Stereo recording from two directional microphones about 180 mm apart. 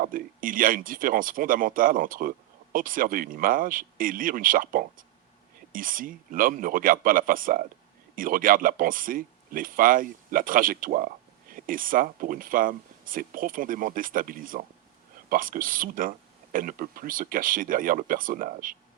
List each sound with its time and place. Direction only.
0.0 s speech: 50° right (ahead or behind)